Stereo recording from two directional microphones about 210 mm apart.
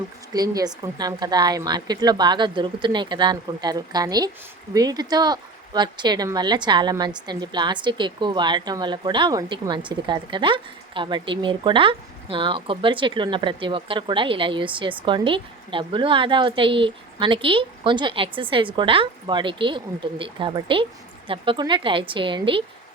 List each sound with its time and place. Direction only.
0.3 s speech: 20° right (ahead or behind)